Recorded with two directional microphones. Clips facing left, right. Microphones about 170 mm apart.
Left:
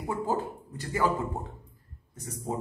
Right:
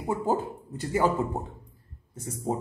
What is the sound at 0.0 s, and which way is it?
A man's voice, 25° right (ahead or behind).